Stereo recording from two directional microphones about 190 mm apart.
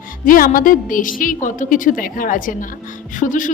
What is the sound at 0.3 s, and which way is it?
A woman's voice, 45° left (ahead or behind).